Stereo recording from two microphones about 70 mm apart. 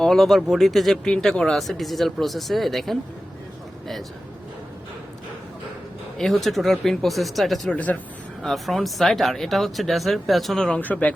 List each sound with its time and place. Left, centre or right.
0.0 s speech: centre
6.1 s speech: centre
7.7 s speech: left
8.4 s speech: centre
10.7 s speech: centre